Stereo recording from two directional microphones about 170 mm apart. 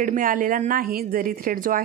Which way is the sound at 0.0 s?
50° right (ahead or behind).